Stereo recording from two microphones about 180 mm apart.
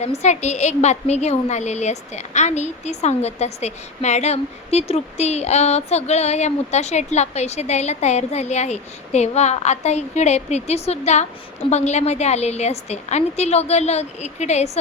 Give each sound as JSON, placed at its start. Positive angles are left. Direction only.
{"t": 0.0, "sound": "a woman's voice", "side_deg": 40}